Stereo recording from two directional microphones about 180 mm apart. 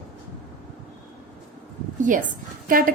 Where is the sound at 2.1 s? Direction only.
45° right (ahead or behind).